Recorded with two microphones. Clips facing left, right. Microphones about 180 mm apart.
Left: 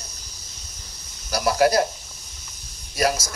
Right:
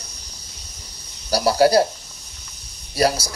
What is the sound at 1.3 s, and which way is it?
Speech, 30° right (ahead or behind).